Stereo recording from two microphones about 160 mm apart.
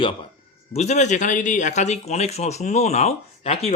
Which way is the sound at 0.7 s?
45° left (ahead or behind).